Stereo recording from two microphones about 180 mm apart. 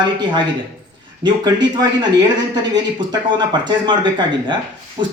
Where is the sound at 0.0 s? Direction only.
25° right (ahead or behind).